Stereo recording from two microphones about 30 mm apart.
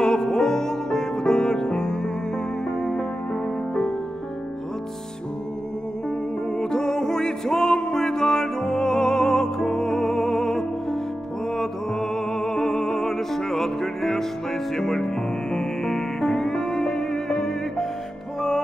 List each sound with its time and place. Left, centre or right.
0.0 s music: left
6.6 s music: left